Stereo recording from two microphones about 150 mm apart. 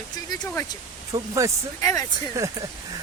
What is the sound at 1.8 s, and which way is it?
Speech, 25° left (ahead or behind).